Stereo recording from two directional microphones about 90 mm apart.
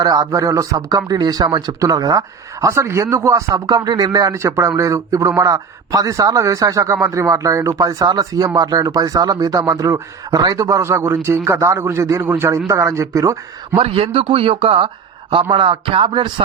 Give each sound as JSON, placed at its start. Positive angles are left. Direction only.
{"t": 0.0, "sound": "speech", "side_deg": -45}
{"t": 0.3, "sound": "speech", "side_deg": -35}
{"t": 13.7, "sound": "speech", "side_deg": -90}
{"t": 15.3, "sound": "a man's voice", "side_deg": -75}